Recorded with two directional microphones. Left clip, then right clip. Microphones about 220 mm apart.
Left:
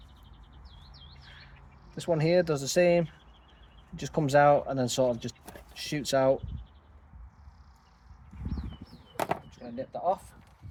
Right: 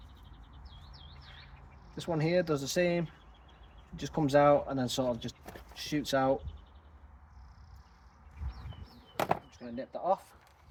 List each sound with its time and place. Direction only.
2.0 s speech: 40° left (ahead or behind)
9.5 s speech: 35° left (ahead or behind)